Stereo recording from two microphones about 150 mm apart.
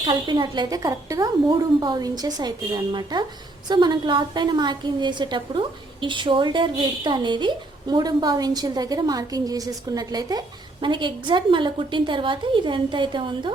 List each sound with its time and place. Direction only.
0.0 s a woman's voice: 30° right (ahead or behind)